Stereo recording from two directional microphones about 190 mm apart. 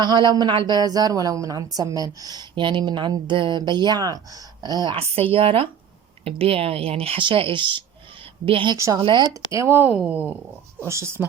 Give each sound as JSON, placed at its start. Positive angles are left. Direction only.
{"t": 0.0, "sound": "a woman's voice", "side_deg": -20}
{"t": 9.5, "sound": "a woman's voice", "side_deg": -15}